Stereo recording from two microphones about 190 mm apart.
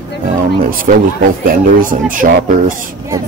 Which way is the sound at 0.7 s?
45° right (ahead or behind).